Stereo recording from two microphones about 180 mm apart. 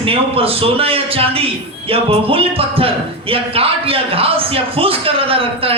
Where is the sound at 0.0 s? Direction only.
30° right (ahead or behind).